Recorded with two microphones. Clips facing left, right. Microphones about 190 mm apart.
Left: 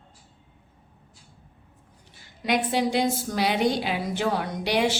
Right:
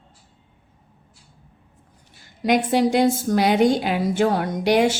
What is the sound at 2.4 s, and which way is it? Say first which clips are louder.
A woman's voice: right 6 dB; 45° right (ahead or behind).